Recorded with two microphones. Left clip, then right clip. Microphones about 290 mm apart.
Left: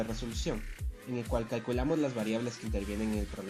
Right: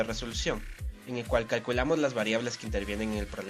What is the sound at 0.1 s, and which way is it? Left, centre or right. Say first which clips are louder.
Speech: right 5 dB; right.